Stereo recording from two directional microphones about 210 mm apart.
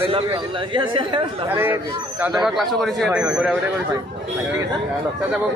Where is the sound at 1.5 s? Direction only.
10° right (ahead or behind).